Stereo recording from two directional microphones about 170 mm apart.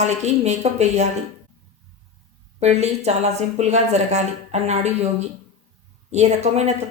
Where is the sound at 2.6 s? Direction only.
40° right (ahead or behind).